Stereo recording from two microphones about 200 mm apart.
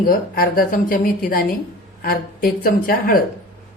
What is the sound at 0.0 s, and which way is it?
Speech, 45° left (ahead or behind).